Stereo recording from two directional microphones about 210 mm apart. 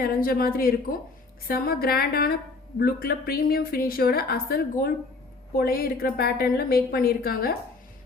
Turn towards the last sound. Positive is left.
turn(degrees=45)  # may be behind; listen again after turning